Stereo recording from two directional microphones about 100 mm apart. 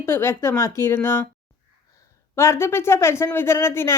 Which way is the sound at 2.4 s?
25° left (ahead or behind).